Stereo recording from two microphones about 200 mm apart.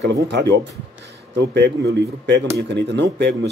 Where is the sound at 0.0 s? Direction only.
55° right (ahead or behind).